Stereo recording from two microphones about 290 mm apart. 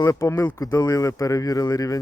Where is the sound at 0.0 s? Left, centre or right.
Centre.